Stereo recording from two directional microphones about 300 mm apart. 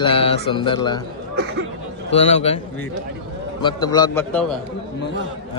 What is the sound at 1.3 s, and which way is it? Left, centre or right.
Speech, right.